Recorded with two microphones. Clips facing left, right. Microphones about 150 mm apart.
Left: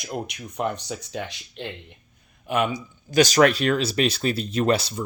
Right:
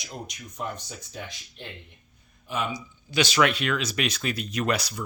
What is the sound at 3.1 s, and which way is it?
Speech, 45° left (ahead or behind).